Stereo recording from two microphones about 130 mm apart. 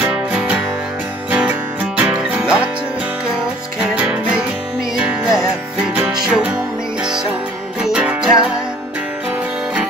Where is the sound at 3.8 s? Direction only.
10° right (ahead or behind).